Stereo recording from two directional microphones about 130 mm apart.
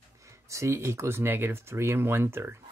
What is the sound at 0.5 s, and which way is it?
Speech, 20° right (ahead or behind).